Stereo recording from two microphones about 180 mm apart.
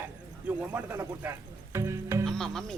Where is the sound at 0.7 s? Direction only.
10° right (ahead or behind).